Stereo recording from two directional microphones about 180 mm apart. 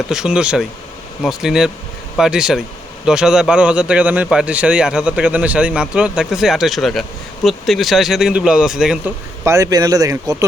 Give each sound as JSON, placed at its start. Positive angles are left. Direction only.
{"t": 0.1, "sound": "a man's voice", "side_deg": -5}
{"t": 9.4, "sound": "speech", "side_deg": -15}